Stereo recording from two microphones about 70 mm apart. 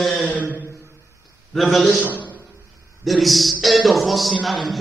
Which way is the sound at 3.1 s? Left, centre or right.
Centre.